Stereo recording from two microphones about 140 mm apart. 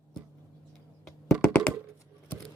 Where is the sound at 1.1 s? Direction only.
Centre (ahead or behind).